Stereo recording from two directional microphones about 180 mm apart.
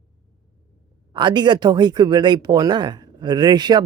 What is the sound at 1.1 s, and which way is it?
Speech, 25° right (ahead or behind).